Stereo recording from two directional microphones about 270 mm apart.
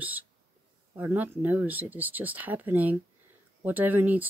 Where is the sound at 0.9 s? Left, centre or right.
Centre.